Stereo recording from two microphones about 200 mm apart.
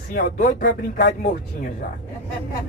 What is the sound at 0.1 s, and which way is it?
A man's voice, 45° left (ahead or behind).